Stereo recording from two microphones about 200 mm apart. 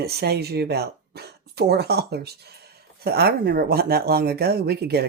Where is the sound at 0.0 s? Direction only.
50° right (ahead or behind).